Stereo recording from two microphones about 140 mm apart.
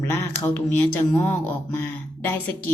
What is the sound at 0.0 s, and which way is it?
Speech, 20° left (ahead or behind).